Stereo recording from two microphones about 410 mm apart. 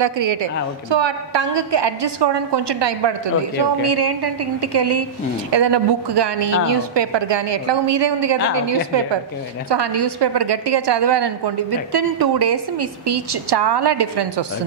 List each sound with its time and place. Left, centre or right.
0.0 s a woman's voice: right
3.8 s a woman's voice: right
5.5 s a woman's voice: right
9.7 s a woman's voice: right